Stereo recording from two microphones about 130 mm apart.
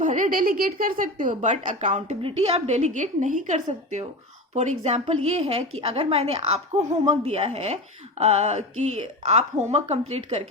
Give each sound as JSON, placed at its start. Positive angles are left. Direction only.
{"t": 0.0, "sound": "a woman's voice", "side_deg": -75}
{"t": 2.2, "sound": "a woman's voice", "side_deg": -50}